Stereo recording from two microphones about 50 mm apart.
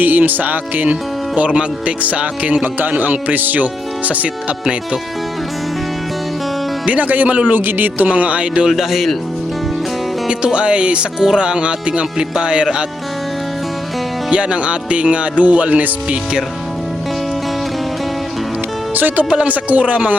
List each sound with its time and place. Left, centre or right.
0.0 s speech: right
1.4 s speech: right
6.8 s speech: right
8.0 s speech: right
8.7 s speech: centre
10.2 s speech: right
14.3 s speech: centre
18.9 s speech: right
19.2 s speech: right